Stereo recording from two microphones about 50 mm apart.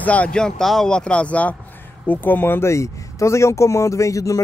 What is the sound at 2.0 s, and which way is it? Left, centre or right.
Speech, left.